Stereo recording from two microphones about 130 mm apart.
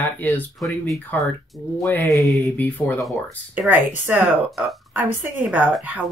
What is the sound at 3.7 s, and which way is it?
Speech, 15° right (ahead or behind).